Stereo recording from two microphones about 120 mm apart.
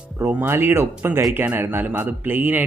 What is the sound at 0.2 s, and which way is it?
Speech, 15° right (ahead or behind).